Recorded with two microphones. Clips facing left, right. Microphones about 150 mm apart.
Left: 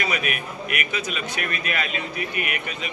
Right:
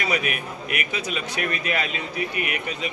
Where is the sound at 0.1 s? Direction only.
30° right (ahead or behind).